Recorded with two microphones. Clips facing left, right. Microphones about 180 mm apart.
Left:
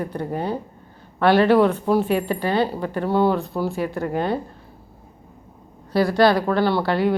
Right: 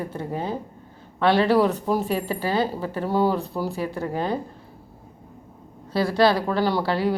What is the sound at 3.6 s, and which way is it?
Speech, 35° right (ahead or behind).